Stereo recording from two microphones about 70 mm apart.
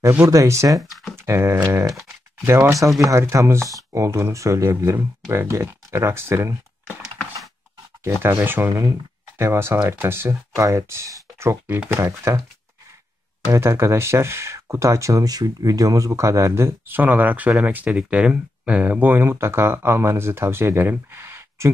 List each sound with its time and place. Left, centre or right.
0.2 s speech: right
0.7 s speech: centre
1.1 s a sound: right
2.4 s speech: right
8.0 s speech: right
11.6 s speech: right
11.9 s speech: right
13.5 s speech: right